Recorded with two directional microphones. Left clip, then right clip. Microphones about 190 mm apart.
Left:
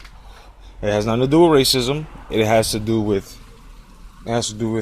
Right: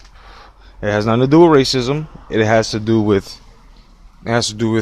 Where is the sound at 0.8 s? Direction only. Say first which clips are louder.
Right 3 dB; 30° right (ahead or behind).